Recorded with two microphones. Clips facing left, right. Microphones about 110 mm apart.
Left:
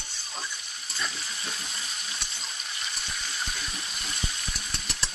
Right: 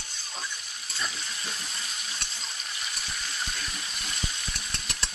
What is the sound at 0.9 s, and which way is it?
Frying, centre (ahead or behind).